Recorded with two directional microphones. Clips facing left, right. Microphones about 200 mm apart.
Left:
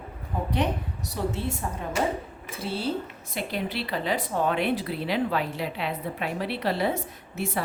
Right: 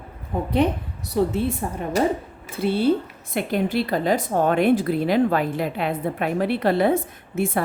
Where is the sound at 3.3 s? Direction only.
50° right (ahead or behind).